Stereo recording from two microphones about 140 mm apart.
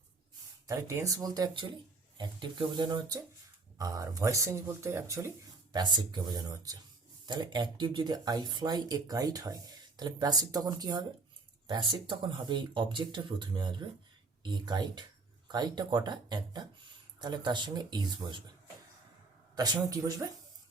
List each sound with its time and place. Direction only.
0.7 s speech: 25° right (ahead or behind)
5.7 s speech: 30° right (ahead or behind)
19.5 s speech: 30° right (ahead or behind)